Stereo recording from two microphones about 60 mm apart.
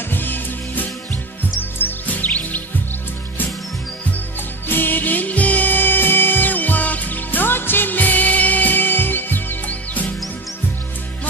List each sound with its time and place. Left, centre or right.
0.1 s music: left
1.6 s music: left
4.6 s music: left